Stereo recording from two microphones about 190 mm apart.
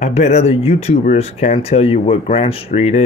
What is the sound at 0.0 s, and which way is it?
Speech, 35° left (ahead or behind).